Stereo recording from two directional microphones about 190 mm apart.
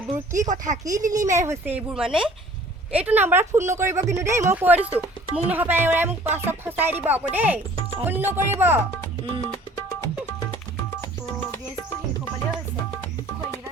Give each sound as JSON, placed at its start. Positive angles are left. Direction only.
{"t": 0.1, "sound": "speech", "side_deg": -40}
{"t": 0.9, "sound": "speech", "side_deg": -20}